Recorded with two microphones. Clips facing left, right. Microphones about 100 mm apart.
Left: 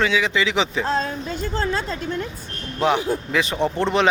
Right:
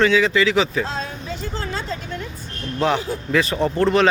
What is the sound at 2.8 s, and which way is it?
A man's voice, 15° left (ahead or behind).